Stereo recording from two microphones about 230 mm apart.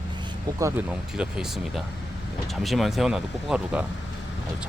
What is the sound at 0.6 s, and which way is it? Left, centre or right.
Speech, centre.